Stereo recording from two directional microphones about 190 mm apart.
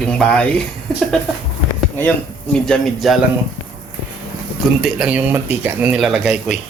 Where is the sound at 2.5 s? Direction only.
5° left (ahead or behind).